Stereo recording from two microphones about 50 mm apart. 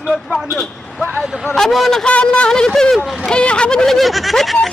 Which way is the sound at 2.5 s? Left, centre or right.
Centre.